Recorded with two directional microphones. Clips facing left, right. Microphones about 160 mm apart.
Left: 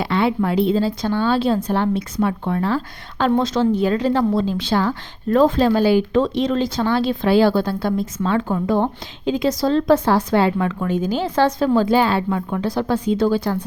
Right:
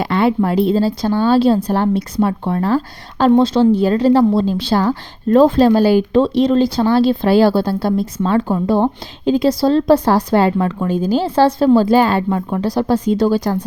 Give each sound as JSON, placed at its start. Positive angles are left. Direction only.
{"t": 0.0, "sound": "a woman's voice", "side_deg": -45}
{"t": 4.4, "sound": "speech", "side_deg": -35}